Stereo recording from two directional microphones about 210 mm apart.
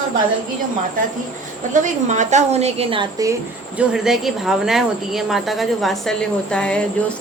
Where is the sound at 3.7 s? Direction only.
5° right (ahead or behind).